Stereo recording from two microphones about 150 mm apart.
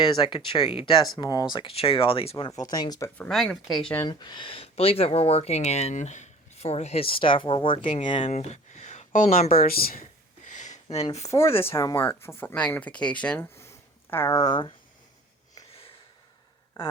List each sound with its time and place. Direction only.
0.1 s speech: 30° left (ahead or behind)
2.6 s speech: 25° left (ahead or behind)
3.2 s speech: centre (ahead or behind)
4.1 s speech: 30° left (ahead or behind)
7.8 s speech: 60° left (ahead or behind)
8.0 s speech: 35° left (ahead or behind)
8.3 s a sound: 50° left (ahead or behind)
11.3 s speech: 20° left (ahead or behind)